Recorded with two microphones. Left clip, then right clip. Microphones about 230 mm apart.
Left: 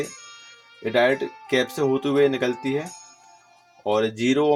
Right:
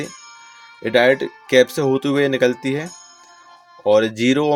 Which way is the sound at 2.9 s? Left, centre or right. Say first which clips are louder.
Right 2 dB; centre.